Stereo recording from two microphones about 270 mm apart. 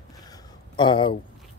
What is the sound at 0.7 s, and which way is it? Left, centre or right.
Speech, centre.